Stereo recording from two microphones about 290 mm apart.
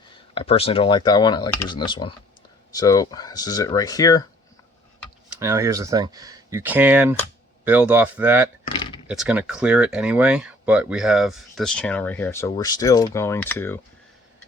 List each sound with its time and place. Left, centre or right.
0.3 s speech: centre
5.4 s speech: centre